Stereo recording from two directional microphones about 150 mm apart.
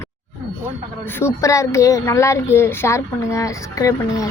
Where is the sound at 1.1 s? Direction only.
15° left (ahead or behind).